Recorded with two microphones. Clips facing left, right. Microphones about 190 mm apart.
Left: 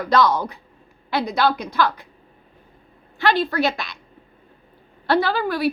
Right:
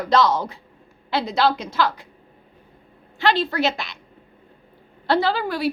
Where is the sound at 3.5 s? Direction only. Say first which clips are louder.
Left 1 dB; 20° right (ahead or behind).